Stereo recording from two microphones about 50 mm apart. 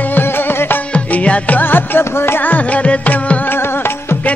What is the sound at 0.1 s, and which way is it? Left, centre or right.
Music, left.